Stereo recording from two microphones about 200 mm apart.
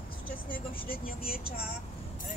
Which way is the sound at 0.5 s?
45° left (ahead or behind).